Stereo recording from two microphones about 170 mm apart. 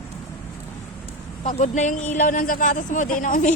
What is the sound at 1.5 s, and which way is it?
A man's voice, 45° left (ahead or behind).